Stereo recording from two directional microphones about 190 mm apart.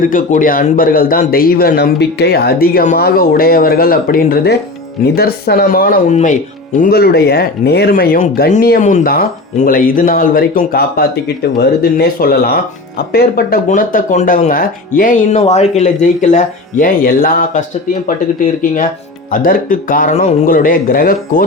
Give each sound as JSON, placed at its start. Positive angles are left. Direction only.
{"t": 0.0, "sound": "a man's voice", "side_deg": 45}
{"t": 13.7, "sound": "speech", "side_deg": 40}
{"t": 19.3, "sound": "a man's voice", "side_deg": 45}